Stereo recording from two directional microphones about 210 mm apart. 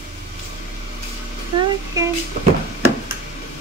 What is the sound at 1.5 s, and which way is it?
Speech, 25° right (ahead or behind).